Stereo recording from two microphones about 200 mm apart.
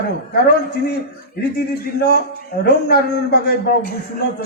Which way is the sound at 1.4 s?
55° left (ahead or behind).